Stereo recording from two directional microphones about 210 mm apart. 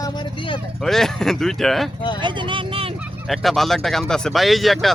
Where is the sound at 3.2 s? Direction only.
Centre (ahead or behind).